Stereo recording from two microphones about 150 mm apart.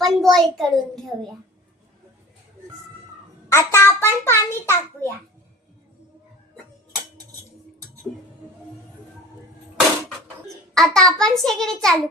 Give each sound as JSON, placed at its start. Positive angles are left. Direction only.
{"t": 0.0, "sound": "a child's voice", "side_deg": 0}
{"t": 3.5, "sound": "a child's voice", "side_deg": 15}
{"t": 10.8, "sound": "a child's voice", "side_deg": 5}